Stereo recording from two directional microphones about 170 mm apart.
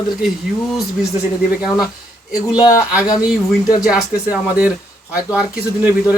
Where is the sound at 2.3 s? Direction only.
5° right (ahead or behind).